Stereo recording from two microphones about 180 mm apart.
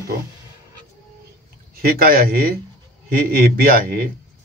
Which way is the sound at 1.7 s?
55° right (ahead or behind).